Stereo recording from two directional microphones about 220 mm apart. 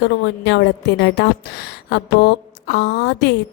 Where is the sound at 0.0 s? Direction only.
50° left (ahead or behind).